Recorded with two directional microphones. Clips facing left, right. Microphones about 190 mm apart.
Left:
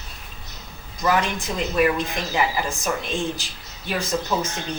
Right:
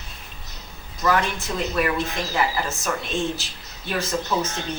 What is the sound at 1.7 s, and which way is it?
A woman's voice, 15° left (ahead or behind).